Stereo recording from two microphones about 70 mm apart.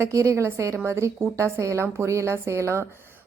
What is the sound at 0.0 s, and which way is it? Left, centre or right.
A woman's voice, right.